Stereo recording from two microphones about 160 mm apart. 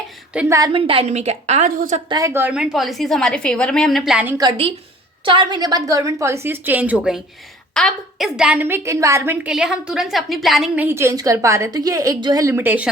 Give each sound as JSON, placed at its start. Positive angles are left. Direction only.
{"t": 0.3, "sound": "a woman's voice", "side_deg": -20}
{"t": 0.7, "sound": "a woman's voice", "side_deg": -35}
{"t": 2.0, "sound": "a woman's voice", "side_deg": -20}
{"t": 4.4, "sound": "a woman's voice", "side_deg": -30}
{"t": 10.8, "sound": "a woman's voice", "side_deg": -15}